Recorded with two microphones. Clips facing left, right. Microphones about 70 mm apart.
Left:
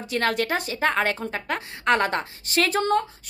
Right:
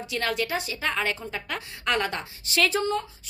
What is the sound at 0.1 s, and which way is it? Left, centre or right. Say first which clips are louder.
A woman's voice: left 4 dB; left.